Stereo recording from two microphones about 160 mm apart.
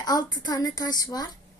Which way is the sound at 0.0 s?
25° left (ahead or behind).